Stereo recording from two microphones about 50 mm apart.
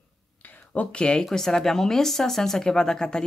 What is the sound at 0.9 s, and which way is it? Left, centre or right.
Speech, centre.